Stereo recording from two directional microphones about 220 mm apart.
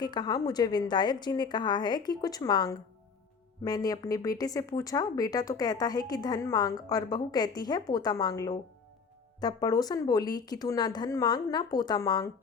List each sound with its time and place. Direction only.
0.0 s a woman's voice: 20° left (ahead or behind)